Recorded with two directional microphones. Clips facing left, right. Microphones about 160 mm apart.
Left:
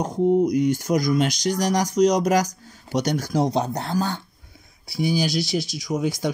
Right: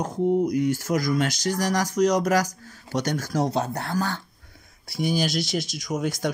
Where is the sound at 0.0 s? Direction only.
20° left (ahead or behind).